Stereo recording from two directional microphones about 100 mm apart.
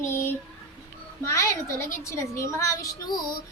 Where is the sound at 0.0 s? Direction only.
25° left (ahead or behind).